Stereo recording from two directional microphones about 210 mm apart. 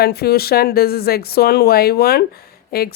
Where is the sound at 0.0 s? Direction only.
50° left (ahead or behind).